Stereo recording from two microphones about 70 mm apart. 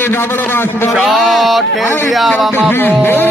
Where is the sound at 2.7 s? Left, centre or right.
Left.